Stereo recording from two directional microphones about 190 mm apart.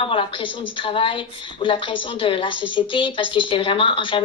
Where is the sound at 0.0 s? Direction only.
25° left (ahead or behind).